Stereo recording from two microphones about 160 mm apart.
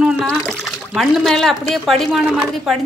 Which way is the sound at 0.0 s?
5° right (ahead or behind).